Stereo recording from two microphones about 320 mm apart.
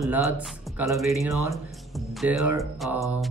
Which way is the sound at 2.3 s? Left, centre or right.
Right.